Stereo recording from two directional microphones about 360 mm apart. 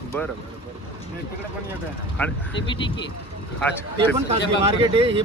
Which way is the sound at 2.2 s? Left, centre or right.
Centre.